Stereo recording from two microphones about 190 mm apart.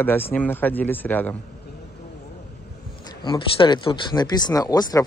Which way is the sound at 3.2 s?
25° left (ahead or behind).